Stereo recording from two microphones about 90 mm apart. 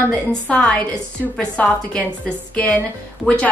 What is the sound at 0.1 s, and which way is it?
A woman's voice, 10° left (ahead or behind).